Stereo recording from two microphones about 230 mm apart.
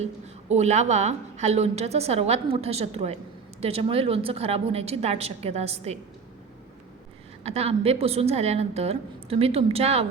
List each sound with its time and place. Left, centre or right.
0.0 s a woman's voice: right
7.4 s a woman's voice: right